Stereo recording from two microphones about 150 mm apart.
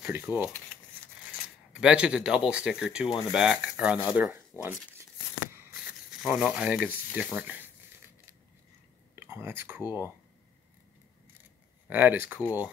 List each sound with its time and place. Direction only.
0.0 s speech: 15° right (ahead or behind)
1.7 s speech: 5° right (ahead or behind)
5.5 s a sound: 10° right (ahead or behind)
9.1 s speech: 15° right (ahead or behind)
9.8 s speech: 20° left (ahead or behind)
11.9 s speech: 10° right (ahead or behind)